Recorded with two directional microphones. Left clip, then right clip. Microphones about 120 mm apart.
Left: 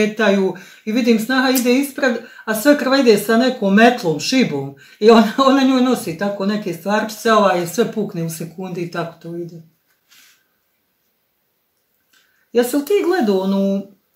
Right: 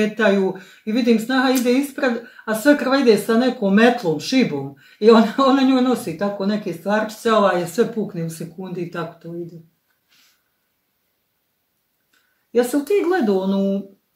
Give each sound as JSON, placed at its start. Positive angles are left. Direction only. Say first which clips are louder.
{"t": 0.0, "sound": "speech", "louder": "left 2 dB", "side_deg": 20}
{"t": 12.5, "sound": "speech", "louder": "left 2 dB", "side_deg": 15}